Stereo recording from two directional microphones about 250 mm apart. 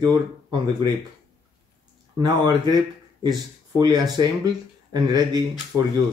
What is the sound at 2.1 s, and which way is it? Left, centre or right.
Speech, centre.